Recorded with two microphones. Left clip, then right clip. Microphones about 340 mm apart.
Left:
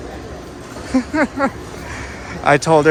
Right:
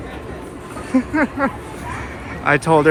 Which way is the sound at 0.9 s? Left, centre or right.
Centre.